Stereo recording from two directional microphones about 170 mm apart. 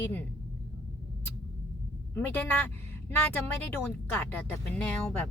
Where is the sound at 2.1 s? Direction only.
10° left (ahead or behind).